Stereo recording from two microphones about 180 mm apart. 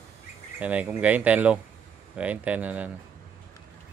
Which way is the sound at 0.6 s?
10° right (ahead or behind).